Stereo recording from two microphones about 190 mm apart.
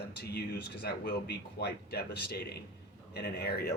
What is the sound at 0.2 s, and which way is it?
Speech, 60° left (ahead or behind).